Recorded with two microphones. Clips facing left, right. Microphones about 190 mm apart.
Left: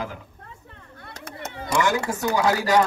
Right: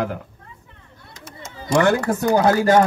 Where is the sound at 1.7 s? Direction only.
60° right (ahead or behind).